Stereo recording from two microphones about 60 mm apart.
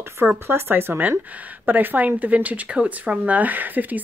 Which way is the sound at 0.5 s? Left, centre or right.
Right.